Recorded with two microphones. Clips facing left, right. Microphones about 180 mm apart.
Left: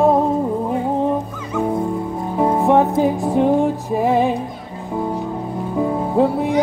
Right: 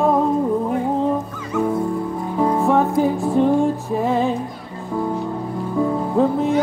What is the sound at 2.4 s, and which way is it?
Music, 20° left (ahead or behind).